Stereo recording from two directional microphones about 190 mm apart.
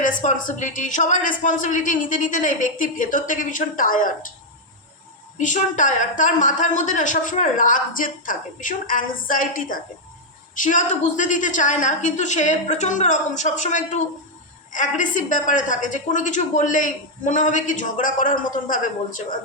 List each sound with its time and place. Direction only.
0.0 s a woman's voice: 45° left (ahead or behind)
5.4 s a woman's voice: 40° left (ahead or behind)